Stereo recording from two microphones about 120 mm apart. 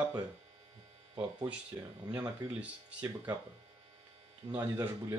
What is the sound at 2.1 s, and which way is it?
Speech, 15° right (ahead or behind).